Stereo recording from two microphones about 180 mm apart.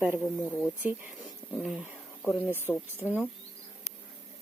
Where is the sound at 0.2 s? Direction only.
Centre (ahead or behind).